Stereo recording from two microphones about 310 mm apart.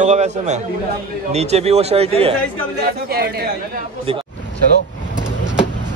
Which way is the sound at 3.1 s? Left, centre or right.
Right.